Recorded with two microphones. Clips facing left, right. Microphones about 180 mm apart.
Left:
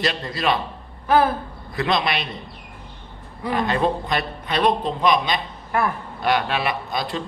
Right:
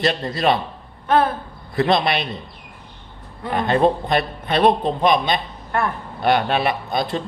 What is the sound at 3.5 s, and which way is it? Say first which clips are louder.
A man's voice: right 4 dB; 45° right (ahead or behind).